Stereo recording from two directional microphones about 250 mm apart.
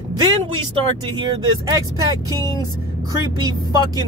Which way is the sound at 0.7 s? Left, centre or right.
Centre.